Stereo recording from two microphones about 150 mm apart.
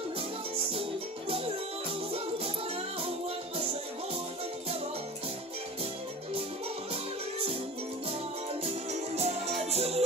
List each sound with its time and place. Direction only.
2.1 s music: 40° right (ahead or behind)
9.1 s music: 45° right (ahead or behind)